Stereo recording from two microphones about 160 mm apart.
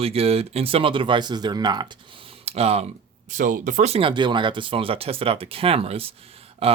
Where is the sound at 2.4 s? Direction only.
40° right (ahead or behind).